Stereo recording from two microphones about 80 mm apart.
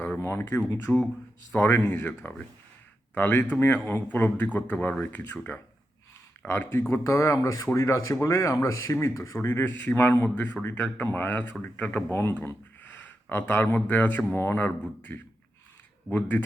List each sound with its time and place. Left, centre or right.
0.2 s speech: left
0.9 s speech: centre
1.5 s speech: left
3.2 s speech: left
9.5 s speech: left
10.2 s speech: left
16.0 s speech: left